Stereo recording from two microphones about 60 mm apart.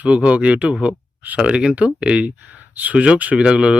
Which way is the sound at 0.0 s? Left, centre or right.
Right.